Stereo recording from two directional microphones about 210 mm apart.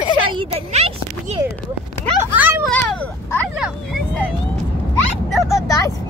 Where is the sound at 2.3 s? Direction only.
5° right (ahead or behind).